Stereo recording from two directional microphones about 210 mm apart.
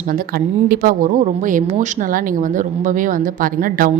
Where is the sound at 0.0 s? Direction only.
45° right (ahead or behind).